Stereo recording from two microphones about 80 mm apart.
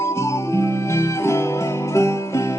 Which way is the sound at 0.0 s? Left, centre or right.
Left.